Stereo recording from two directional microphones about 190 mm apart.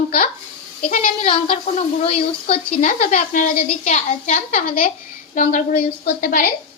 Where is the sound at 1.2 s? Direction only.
30° left (ahead or behind); by 6.5 s 45° left (ahead or behind).